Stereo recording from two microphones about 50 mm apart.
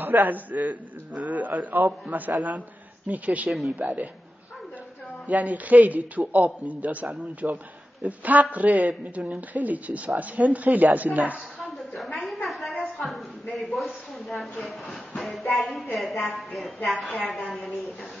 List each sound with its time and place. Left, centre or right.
0.0 s speech: right
5.2 s a woman's voice: right
11.6 s a sound: centre
13.0 s a woman's voice: centre